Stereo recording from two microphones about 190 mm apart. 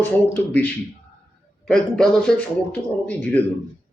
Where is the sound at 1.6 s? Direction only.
Centre (ahead or behind).